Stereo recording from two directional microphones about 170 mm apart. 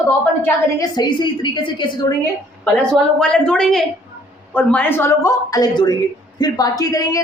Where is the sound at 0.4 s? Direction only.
25° left (ahead or behind).